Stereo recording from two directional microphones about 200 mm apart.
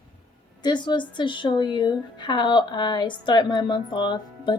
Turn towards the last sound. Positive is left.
turn(degrees=20)  # may be behind; listen again after turning